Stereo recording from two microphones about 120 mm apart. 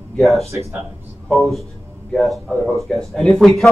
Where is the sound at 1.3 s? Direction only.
Centre (ahead or behind).